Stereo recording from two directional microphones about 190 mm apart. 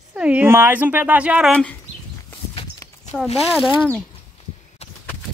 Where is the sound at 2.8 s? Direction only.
20° left (ahead or behind).